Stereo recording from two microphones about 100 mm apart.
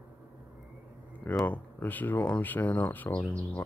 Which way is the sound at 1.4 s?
15° left (ahead or behind).